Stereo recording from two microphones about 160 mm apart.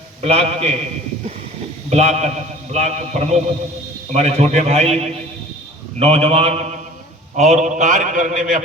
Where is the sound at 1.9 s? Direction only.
45° right (ahead or behind).